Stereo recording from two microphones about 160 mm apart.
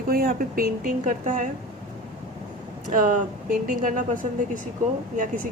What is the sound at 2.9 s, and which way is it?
A woman's voice, 55° right (ahead or behind).